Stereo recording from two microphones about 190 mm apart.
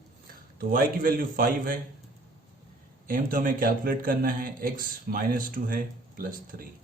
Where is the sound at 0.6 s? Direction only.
50° right (ahead or behind).